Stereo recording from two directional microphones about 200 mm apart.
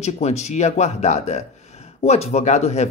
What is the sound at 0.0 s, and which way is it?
Speech, 35° left (ahead or behind).